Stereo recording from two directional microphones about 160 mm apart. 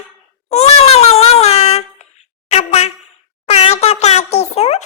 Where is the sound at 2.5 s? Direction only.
40° left (ahead or behind).